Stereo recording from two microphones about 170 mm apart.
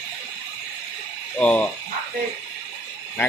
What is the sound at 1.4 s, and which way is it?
Speech, 5° left (ahead or behind).